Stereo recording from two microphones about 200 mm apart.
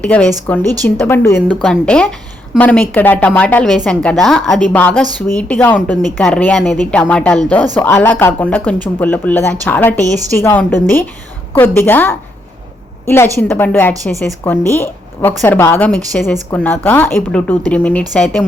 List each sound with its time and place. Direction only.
0.0 s a woman's voice: 5° left (ahead or behind)
0.6 s a woman's voice: 20° right (ahead or behind)
0.9 s a woman's voice: 10° left (ahead or behind)
9.9 s a woman's voice: 15° right (ahead or behind)
10.3 s a woman's voice: 10° left (ahead or behind)